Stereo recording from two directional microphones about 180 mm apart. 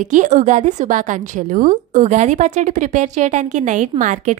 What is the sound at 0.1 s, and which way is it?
A woman's voice, 40° right (ahead or behind).